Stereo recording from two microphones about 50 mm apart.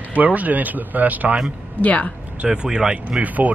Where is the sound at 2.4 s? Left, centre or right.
Centre.